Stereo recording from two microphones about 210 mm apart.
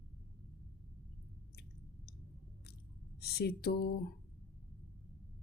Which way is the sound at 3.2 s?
50° left (ahead or behind).